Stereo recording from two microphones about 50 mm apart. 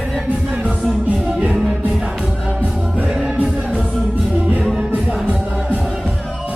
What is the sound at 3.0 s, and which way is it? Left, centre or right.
Music, right.